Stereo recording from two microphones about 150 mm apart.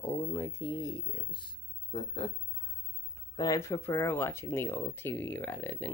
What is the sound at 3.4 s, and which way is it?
Speech, 20° left (ahead or behind).